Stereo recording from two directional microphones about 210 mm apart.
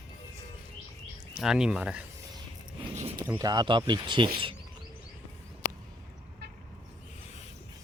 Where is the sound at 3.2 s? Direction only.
15° right (ahead or behind).